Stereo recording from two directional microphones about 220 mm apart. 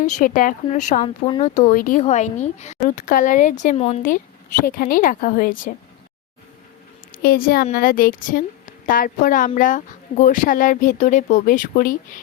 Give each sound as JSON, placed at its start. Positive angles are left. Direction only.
{"t": 0.0, "sound": "speech", "side_deg": 35}
{"t": 7.2, "sound": "speech", "side_deg": 40}